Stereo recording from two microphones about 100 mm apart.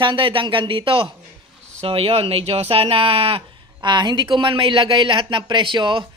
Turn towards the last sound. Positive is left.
turn(degrees=-55)  # may be behind; listen again after turning